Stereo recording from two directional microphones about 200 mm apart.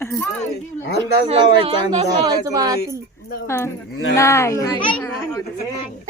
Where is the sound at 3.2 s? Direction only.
50° left (ahead or behind).